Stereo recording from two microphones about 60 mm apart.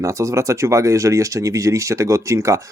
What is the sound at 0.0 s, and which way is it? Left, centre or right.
Speech, right.